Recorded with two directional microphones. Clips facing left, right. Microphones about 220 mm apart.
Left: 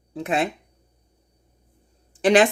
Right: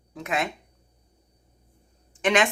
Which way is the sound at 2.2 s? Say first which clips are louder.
Left 6 dB; 35° left (ahead or behind).